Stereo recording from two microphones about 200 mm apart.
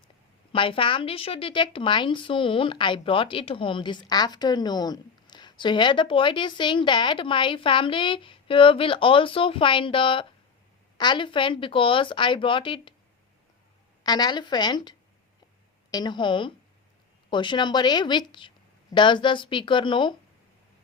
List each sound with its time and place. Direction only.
0.5 s a woman's voice: 25° left (ahead or behind)
14.0 s a woman's voice: 20° left (ahead or behind)